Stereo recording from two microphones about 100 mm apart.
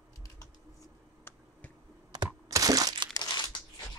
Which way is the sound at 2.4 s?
35° right (ahead or behind).